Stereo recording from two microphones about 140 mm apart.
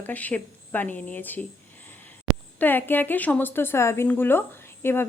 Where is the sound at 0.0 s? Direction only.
10° left (ahead or behind).